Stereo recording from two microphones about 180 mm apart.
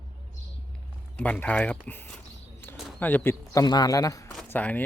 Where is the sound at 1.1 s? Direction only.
5° left (ahead or behind).